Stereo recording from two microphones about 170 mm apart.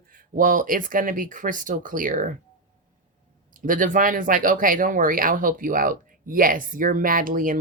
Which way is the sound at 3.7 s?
50° right (ahead or behind).